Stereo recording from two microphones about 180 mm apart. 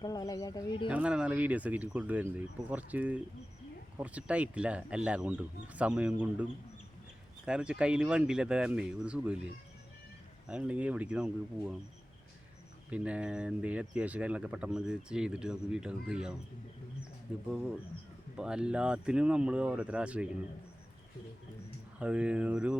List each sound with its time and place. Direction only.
0.0 s speech: 20° left (ahead or behind)
0.9 s speech: 5° right (ahead or behind)
10.5 s speech: 5° right (ahead or behind)
12.9 s speech: 5° right (ahead or behind)
21.9 s speech: 5° right (ahead or behind)